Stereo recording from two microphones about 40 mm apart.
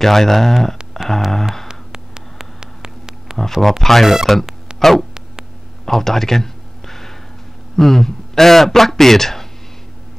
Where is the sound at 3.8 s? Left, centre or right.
Centre.